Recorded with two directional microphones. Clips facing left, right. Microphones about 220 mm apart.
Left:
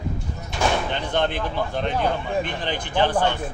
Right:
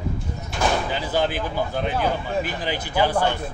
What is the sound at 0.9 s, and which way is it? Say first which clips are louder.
A man's voice: even; 5° right (ahead or behind).